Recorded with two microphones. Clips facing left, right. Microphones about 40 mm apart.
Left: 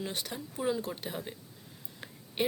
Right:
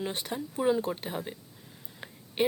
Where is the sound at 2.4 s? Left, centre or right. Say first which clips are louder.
Right 4 dB; centre.